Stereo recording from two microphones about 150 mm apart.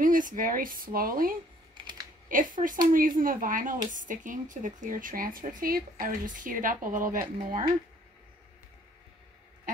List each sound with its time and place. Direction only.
0.0 s speech: 65° right (ahead or behind)